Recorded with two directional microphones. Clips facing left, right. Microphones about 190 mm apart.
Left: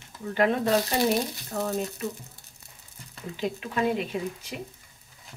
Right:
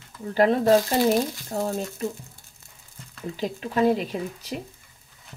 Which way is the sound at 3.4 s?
35° right (ahead or behind).